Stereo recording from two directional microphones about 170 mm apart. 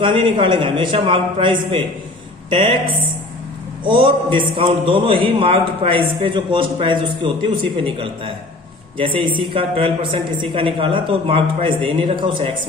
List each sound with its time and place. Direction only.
0.0 s a man's voice: 30° right (ahead or behind)
3.8 s a man's voice: 30° right (ahead or behind)
9.4 s a man's voice: 30° right (ahead or behind)